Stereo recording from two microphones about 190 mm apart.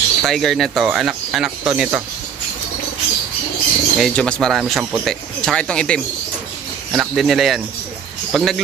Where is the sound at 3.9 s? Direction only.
Centre (ahead or behind).